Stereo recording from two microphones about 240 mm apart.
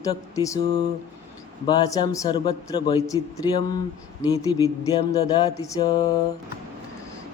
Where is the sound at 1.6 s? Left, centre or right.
Centre.